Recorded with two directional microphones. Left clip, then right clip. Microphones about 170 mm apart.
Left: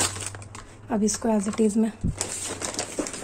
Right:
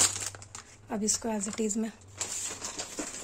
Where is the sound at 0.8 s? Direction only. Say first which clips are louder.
Left 7 dB; centre (ahead or behind).